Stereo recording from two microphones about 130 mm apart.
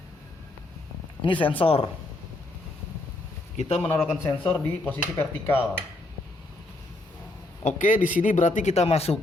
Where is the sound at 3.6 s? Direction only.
55° left (ahead or behind).